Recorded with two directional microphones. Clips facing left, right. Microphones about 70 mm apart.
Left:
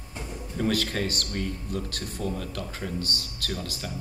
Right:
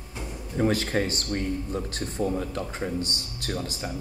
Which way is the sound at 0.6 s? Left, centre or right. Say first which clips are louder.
Right 3 dB; right.